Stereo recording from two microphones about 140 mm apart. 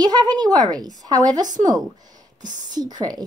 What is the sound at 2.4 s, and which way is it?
Speech, 65° right (ahead or behind).